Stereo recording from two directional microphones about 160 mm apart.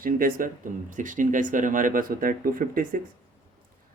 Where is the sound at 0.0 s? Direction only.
60° right (ahead or behind).